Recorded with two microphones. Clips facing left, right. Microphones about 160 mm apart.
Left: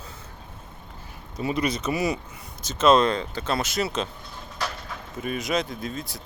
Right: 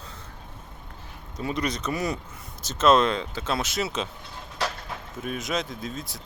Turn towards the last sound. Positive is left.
turn(degrees=0)  # may be behind; listen again after turning